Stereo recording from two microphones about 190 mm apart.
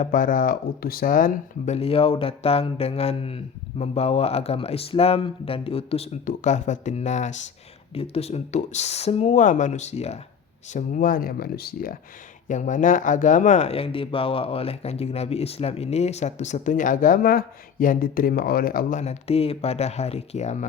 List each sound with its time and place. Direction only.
0.0 s speech: 45° left (ahead or behind)
12.5 s speech: 40° left (ahead or behind)